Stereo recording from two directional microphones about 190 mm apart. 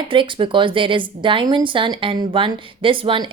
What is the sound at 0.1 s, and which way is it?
Speech, 25° right (ahead or behind).